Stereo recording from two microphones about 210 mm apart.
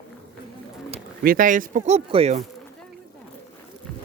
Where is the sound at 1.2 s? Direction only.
40° right (ahead or behind).